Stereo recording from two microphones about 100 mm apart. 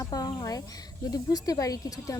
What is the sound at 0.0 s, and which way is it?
Speech, 40° left (ahead or behind).